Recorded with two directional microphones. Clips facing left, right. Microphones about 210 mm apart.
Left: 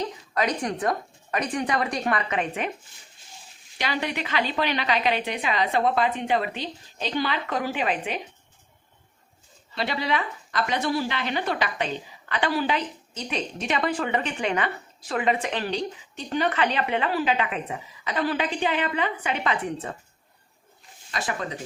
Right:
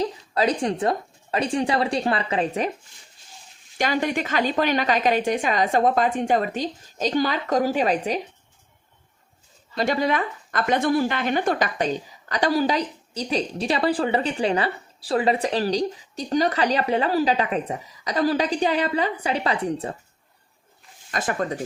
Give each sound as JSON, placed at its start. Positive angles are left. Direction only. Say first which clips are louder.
{"t": 0.0, "sound": "a woman's voice", "louder": "right 4 dB", "side_deg": -30}
{"t": 3.8, "sound": "a woman's voice", "louder": "right 5 dB", "side_deg": -45}
{"t": 9.7, "sound": "a woman's voice", "louder": "right 5 dB", "side_deg": -45}
{"t": 21.1, "sound": "a woman's voice", "louder": "right 5 dB", "side_deg": -50}